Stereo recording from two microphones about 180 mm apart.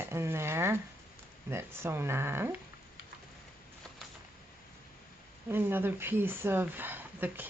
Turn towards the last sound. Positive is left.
turn(degrees=-10)  # may be behind; listen again after turning